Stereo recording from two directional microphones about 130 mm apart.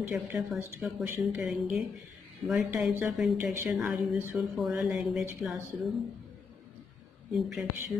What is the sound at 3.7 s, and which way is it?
Speech, centre (ahead or behind).